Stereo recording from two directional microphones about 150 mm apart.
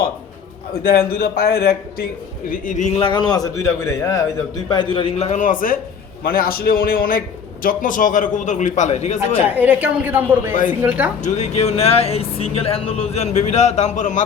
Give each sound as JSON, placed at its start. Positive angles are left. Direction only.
{"t": 0.7, "sound": "a man's voice", "side_deg": 85}
{"t": 2.5, "sound": "a man's voice", "side_deg": 55}
{"t": 3.0, "sound": "a man's voice", "side_deg": 30}
{"t": 4.9, "sound": "a man's voice", "side_deg": 40}
{"t": 6.2, "sound": "a man's voice", "side_deg": 80}
{"t": 9.5, "sound": "a woman's voice", "side_deg": -10}
{"t": 10.5, "sound": "a man's voice", "side_deg": 60}
{"t": 10.8, "sound": "a woman's voice", "side_deg": -10}
{"t": 11.2, "sound": "speech", "side_deg": 50}